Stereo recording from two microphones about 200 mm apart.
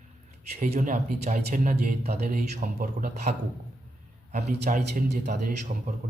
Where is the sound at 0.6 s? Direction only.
35° right (ahead or behind).